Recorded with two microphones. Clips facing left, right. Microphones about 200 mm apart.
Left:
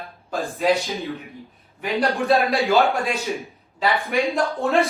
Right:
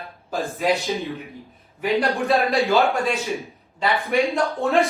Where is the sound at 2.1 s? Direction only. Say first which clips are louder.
Left 1 dB; centre (ahead or behind).